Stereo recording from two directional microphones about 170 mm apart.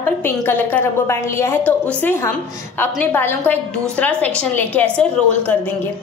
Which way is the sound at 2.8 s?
10° left (ahead or behind).